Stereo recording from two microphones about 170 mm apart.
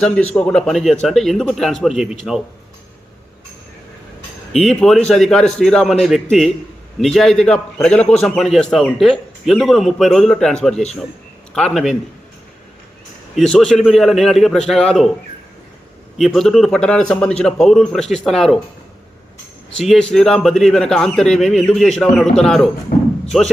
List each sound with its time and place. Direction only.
0.0 s a man's voice: 5° left (ahead or behind)
4.5 s a man's voice: 5° left (ahead or behind)
13.3 s a man's voice: 5° left (ahead or behind)
16.1 s a man's voice: centre (ahead or behind)
19.7 s a man's voice: centre (ahead or behind)
22.9 s a sound: 60° left (ahead or behind)
23.3 s a man's voice: centre (ahead or behind)